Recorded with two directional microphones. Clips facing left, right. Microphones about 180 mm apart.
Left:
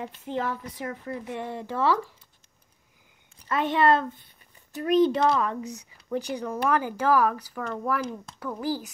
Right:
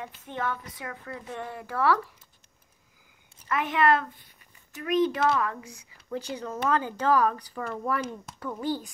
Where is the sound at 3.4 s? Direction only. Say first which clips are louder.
Left 2 dB; 30° left (ahead or behind).